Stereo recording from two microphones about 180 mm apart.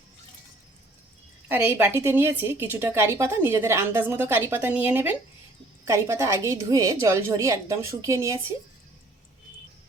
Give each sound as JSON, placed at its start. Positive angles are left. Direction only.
{"t": 1.5, "sound": "a woman's voice", "side_deg": -10}